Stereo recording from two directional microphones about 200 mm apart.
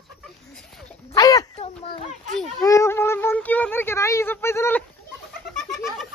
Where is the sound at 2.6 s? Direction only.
15° left (ahead or behind).